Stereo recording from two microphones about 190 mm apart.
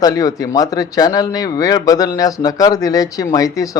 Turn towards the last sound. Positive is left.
turn(degrees=20)  # may be behind; listen again after turning